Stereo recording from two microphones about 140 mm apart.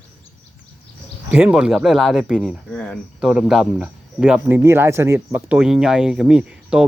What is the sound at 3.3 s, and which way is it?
Speech, 5° right (ahead or behind).